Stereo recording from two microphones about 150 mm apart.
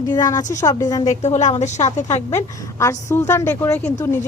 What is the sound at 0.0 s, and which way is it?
A woman's voice, 25° left (ahead or behind).